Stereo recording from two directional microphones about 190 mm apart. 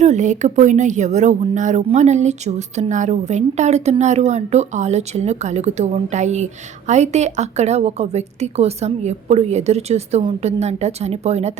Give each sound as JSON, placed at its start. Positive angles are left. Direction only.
{"t": 0.0, "sound": "speech", "side_deg": -40}